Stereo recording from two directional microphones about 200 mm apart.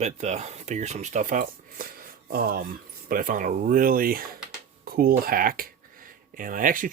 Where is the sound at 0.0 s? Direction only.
35° right (ahead or behind).